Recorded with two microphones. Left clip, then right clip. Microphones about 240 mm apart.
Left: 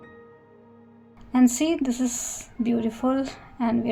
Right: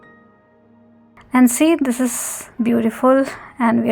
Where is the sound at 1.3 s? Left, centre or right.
Right.